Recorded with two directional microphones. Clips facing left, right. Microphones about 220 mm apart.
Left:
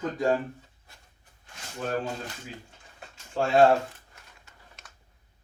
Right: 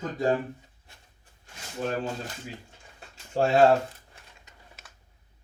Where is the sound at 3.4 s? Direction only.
40° right (ahead or behind).